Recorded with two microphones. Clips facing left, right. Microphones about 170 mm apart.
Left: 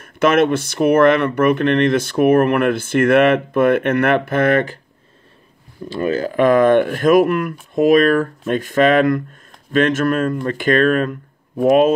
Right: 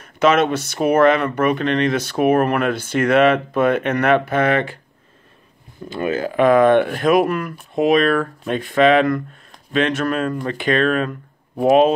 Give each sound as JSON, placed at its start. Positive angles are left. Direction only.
{"t": 0.0, "sound": "speech", "side_deg": 55}
{"t": 5.9, "sound": "speech", "side_deg": 40}